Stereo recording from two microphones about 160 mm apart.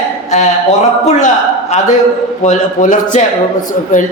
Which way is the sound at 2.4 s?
50° left (ahead or behind).